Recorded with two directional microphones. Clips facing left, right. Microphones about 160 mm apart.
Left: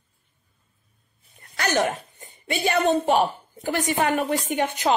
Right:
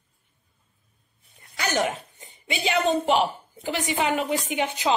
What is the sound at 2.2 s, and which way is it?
Speech, 50° left (ahead or behind).